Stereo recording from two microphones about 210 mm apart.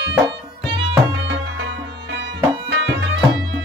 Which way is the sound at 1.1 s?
60° right (ahead or behind).